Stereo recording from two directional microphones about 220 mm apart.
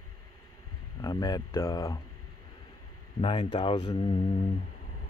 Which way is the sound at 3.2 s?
25° left (ahead or behind).